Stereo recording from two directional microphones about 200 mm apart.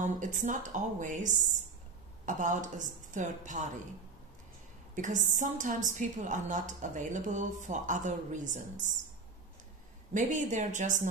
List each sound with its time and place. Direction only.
0.0 s a woman's voice: 40° right (ahead or behind)
4.9 s a woman's voice: 40° right (ahead or behind)
10.1 s a woman's voice: 40° right (ahead or behind)